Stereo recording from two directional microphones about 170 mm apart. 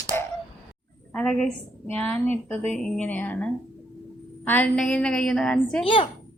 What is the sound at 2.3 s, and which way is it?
Speech, 40° right (ahead or behind).